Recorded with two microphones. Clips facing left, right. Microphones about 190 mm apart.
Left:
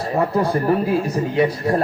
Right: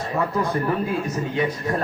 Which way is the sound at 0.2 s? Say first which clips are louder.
Left 4 dB; 35° left (ahead or behind).